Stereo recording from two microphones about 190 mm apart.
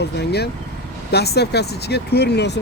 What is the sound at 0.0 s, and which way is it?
Speech, 60° left (ahead or behind).